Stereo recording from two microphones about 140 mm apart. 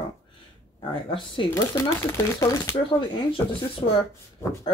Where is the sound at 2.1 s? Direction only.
20° left (ahead or behind).